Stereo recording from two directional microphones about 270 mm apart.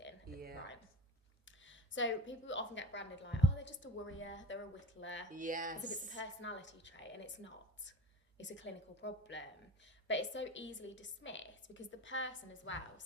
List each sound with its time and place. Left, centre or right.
0.3 s a sound: right
1.5 s a woman's voice: left
5.3 s speech: right
6.1 s a woman's voice: left